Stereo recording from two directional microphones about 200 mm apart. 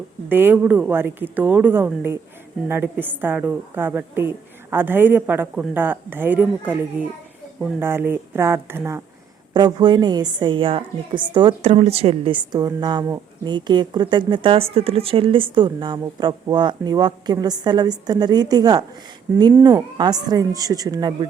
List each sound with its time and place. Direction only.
0.3 s a woman's voice: 10° right (ahead or behind)